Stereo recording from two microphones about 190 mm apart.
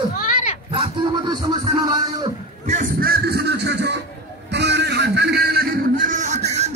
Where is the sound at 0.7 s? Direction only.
25° right (ahead or behind).